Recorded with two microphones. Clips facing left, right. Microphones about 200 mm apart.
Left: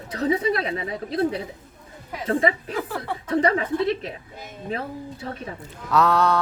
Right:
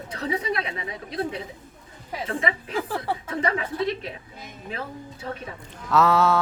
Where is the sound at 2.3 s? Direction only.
40° left (ahead or behind).